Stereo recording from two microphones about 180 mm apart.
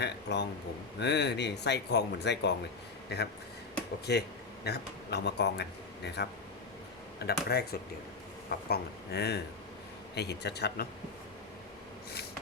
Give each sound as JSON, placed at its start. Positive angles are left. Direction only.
{"t": 0.0, "sound": "speech", "side_deg": 70}